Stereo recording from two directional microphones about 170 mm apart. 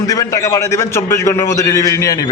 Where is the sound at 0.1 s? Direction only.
20° left (ahead or behind).